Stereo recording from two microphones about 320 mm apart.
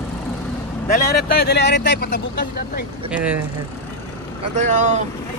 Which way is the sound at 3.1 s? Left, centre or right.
Centre.